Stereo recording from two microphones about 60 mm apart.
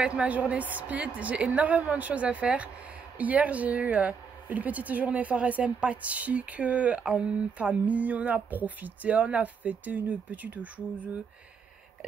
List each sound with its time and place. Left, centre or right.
0.0 s speech: centre